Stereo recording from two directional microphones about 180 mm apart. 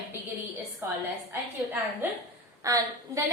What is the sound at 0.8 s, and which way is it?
A woman's voice, 15° right (ahead or behind).